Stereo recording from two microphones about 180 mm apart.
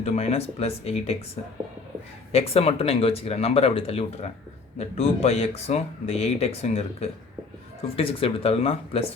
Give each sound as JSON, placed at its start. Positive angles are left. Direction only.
{"t": 0.0, "sound": "speech", "side_deg": 35}
{"t": 2.3, "sound": "speech", "side_deg": 35}